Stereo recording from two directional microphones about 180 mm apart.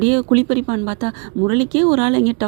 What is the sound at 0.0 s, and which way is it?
Speech, 35° right (ahead or behind).